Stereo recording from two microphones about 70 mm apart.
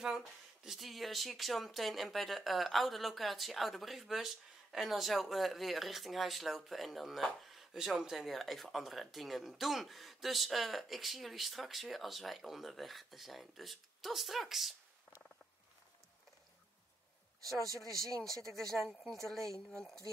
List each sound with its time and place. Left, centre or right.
0.7 s speech: centre
18.1 s speech: centre